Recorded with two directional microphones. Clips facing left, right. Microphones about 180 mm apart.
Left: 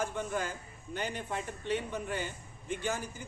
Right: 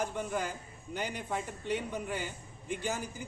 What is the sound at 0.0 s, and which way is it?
A man's voice, 15° right (ahead or behind).